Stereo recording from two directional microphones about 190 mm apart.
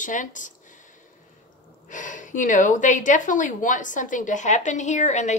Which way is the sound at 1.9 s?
40° left (ahead or behind).